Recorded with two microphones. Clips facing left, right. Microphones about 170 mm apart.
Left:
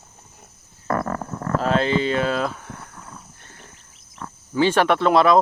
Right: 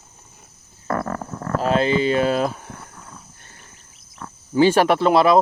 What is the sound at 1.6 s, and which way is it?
Speech, 10° right (ahead or behind).